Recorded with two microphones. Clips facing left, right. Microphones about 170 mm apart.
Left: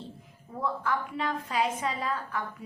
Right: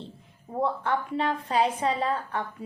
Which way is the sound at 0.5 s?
30° right (ahead or behind).